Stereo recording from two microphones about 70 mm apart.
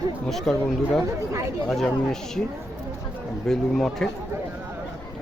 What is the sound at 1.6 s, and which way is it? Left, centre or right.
Speech, centre.